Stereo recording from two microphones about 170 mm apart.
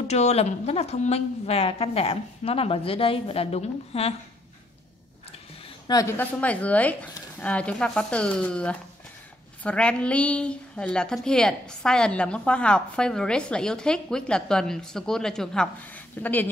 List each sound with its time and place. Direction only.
0.1 s a woman's voice: 40° left (ahead or behind)
5.9 s a woman's voice: 20° left (ahead or behind)